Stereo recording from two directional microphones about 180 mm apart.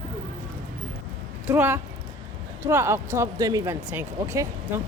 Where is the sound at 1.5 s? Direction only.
10° right (ahead or behind).